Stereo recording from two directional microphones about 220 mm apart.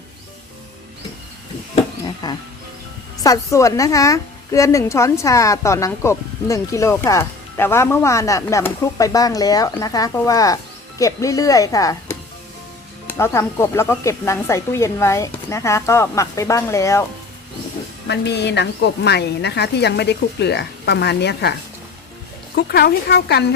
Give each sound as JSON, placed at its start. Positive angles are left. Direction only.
{"t": 1.7, "sound": "a sound", "side_deg": 20}
{"t": 3.2, "sound": "a woman's voice", "side_deg": 15}
{"t": 18.1, "sound": "a woman's voice", "side_deg": 50}
{"t": 22.5, "sound": "a woman's voice", "side_deg": 45}